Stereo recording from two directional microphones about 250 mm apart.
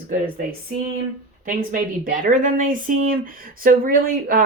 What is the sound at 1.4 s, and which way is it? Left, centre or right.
Speech, right.